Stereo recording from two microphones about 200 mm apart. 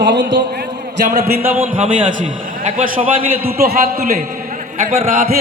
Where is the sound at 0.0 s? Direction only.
60° right (ahead or behind).